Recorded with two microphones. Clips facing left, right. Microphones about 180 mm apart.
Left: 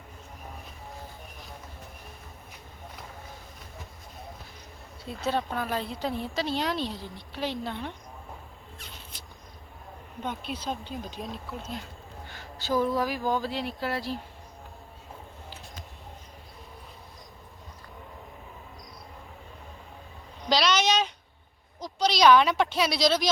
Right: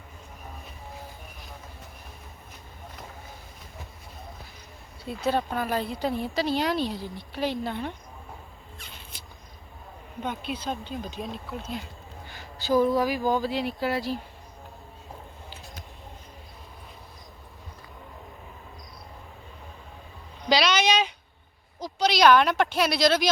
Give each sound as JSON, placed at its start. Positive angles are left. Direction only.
{"t": 5.2, "sound": "speech", "side_deg": -5}
{"t": 10.2, "sound": "speech", "side_deg": -5}
{"t": 20.5, "sound": "a sound", "side_deg": -5}
{"t": 21.8, "sound": "speech", "side_deg": -5}